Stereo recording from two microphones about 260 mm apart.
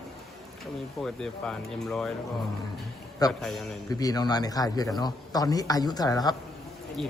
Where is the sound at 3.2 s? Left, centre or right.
Centre.